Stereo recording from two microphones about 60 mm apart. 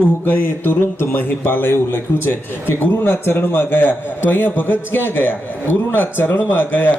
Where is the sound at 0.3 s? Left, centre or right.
Left.